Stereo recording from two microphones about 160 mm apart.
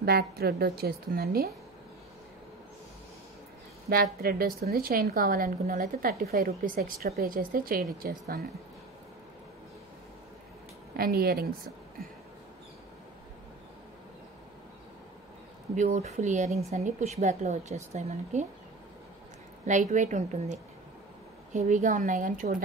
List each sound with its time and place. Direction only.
0.0 s a woman's voice: 80° right
3.9 s a woman's voice: 65° right (ahead or behind)
11.0 s a woman's voice: 70° right (ahead or behind)
15.7 s speech: 50° right (ahead or behind)
19.6 s speech: 50° right (ahead or behind)
21.5 s a woman's voice: 50° right (ahead or behind)